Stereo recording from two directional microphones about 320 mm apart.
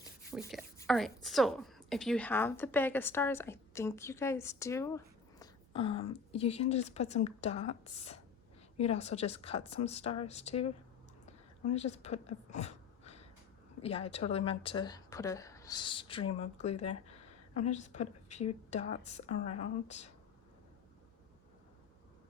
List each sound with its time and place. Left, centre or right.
0.3 s a woman's voice: centre
11.3 s a sound: centre
13.8 s a woman's voice: centre